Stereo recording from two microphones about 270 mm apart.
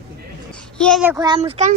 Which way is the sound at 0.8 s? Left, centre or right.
Centre.